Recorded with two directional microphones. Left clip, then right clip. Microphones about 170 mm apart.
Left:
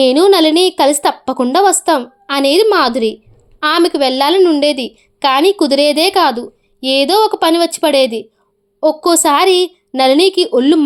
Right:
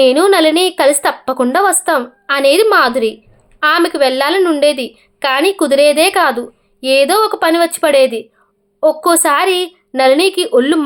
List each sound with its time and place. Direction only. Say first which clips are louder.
0.0 s a woman's voice: even; 40° left (ahead or behind)